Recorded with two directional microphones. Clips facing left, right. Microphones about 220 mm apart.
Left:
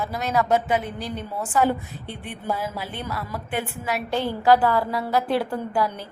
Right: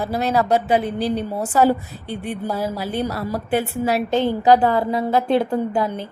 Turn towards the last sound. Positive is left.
turn(degrees=-25)  # may be behind; listen again after turning